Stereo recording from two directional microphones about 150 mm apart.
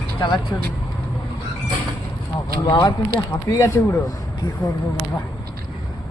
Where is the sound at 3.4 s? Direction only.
20° left (ahead or behind).